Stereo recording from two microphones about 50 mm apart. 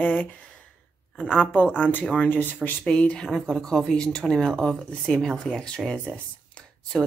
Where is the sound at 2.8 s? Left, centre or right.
Left.